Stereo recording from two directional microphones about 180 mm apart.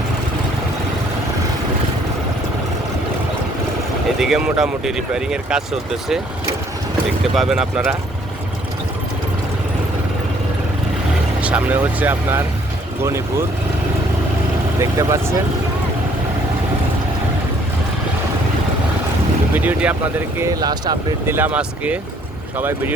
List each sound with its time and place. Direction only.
4.2 s speech: 5° right (ahead or behind)
7.3 s speech: 5° right (ahead or behind)
11.3 s speech: 5° right (ahead or behind)
14.8 s speech: 15° right (ahead or behind)
19.5 s speech: 10° right (ahead or behind)
20.6 s speech: 20° right (ahead or behind)